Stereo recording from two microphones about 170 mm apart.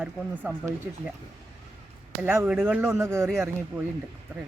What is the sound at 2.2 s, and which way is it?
Speech, 10° right (ahead or behind).